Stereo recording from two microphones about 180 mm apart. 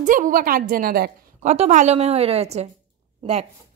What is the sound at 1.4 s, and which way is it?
A woman's voice, 40° right (ahead or behind).